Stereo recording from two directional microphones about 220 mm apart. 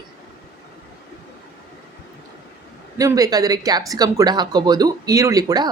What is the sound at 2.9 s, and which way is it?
Speech, 15° right (ahead or behind).